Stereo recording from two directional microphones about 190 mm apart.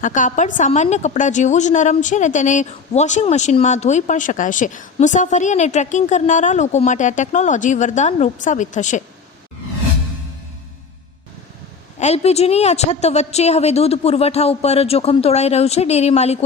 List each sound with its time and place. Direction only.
0.0 s a woman's voice: 40° left (ahead or behind)
11.9 s a woman's voice: 35° left (ahead or behind)